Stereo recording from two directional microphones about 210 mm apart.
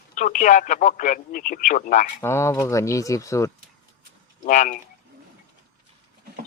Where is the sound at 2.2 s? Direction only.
10° left (ahead or behind).